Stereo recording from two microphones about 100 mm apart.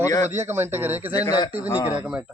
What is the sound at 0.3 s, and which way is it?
Speech, 25° right (ahead or behind).